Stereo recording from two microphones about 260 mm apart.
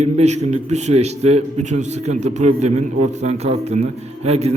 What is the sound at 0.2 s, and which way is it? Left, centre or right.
A man's voice, right.